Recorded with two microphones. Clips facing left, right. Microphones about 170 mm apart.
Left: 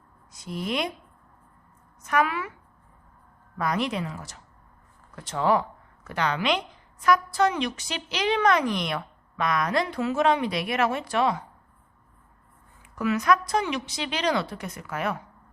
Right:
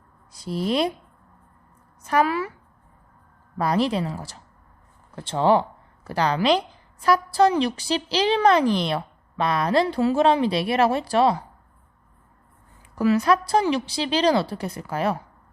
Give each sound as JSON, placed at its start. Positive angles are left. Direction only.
{"t": 0.3, "sound": "a woman's voice", "side_deg": -35}
{"t": 2.0, "sound": "a woman's voice", "side_deg": -35}
{"t": 3.6, "sound": "a woman's voice", "side_deg": -30}
{"t": 13.0, "sound": "a woman's voice", "side_deg": -30}